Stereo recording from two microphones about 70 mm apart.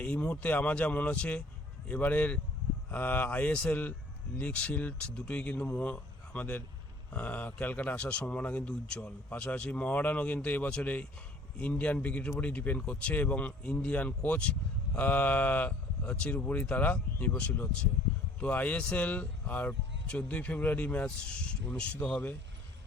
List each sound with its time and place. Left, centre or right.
0.0 s speech: centre